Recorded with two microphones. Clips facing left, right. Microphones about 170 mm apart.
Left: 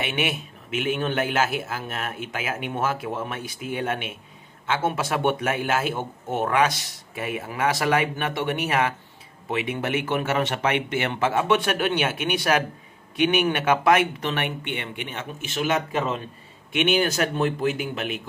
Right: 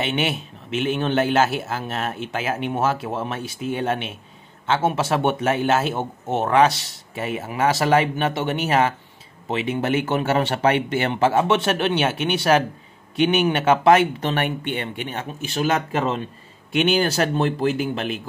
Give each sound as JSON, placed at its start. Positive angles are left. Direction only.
{"t": 0.0, "sound": "a man's voice", "side_deg": -30}